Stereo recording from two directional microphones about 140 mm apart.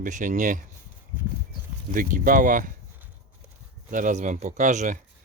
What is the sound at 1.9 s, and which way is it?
Speech, 75° right (ahead or behind).